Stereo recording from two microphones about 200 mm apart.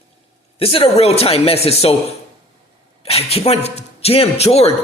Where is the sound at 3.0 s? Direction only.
30° left (ahead or behind).